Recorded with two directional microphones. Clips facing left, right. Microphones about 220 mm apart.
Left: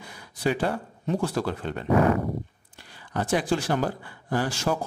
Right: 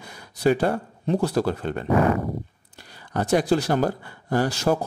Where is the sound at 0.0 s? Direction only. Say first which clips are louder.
Right 5 dB; 40° right (ahead or behind).